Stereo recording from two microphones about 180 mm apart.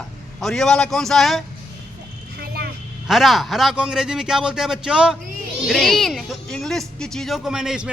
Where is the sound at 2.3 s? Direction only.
60° right (ahead or behind).